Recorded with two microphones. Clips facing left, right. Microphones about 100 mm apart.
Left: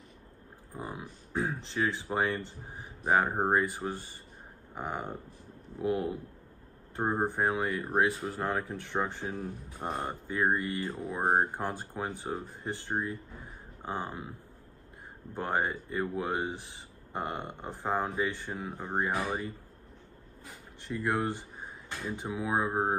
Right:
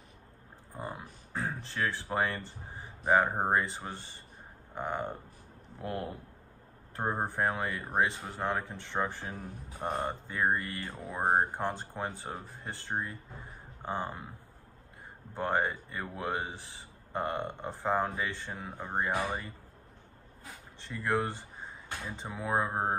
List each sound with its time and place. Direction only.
0.7 s speech: 10° left (ahead or behind)
7.2 s speech: 15° left (ahead or behind)
8.8 s speech: 15° left (ahead or behind)
9.3 s speech: centre (ahead or behind)
15.3 s speech: 10° left (ahead or behind)
18.5 s speech: 5° left (ahead or behind)
20.8 s speech: 15° left (ahead or behind)